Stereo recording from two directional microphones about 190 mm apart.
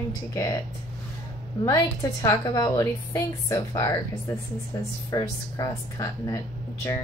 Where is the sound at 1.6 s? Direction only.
20° left (ahead or behind).